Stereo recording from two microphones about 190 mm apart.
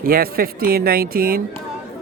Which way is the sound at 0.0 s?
50° right (ahead or behind).